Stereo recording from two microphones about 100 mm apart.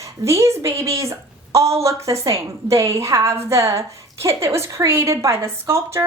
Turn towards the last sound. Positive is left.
turn(degrees=-30)  # may be behind; listen again after turning